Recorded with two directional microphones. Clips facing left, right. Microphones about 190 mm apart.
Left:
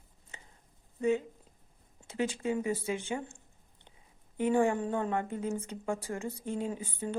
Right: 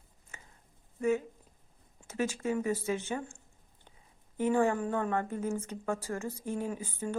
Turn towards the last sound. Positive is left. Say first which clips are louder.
# even
turn(degrees=20)  # may be behind; listen again after turning